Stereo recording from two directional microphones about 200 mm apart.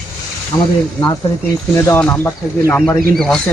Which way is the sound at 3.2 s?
Centre (ahead or behind).